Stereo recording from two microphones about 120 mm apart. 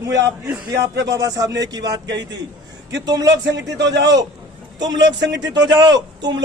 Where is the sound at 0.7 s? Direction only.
30° right (ahead or behind).